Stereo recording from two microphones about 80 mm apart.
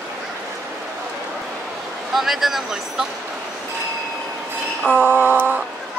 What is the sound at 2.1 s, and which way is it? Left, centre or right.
Speech, centre.